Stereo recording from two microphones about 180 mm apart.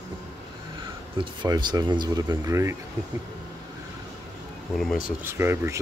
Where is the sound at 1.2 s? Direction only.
25° right (ahead or behind).